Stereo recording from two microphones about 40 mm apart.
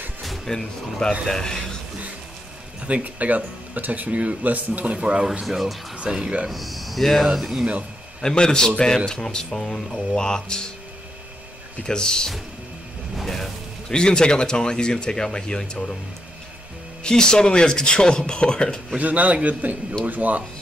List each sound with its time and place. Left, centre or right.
0.5 s a man's voice: centre
2.9 s speech: right
4.9 s speech: right
5.4 s speech: centre
6.1 s speech: right
6.5 s a man's voice: centre
8.2 s speech: centre
11.8 s speech: centre
13.1 s music: centre
13.8 s speech: centre
17.0 s speech: centre
18.9 s speech: right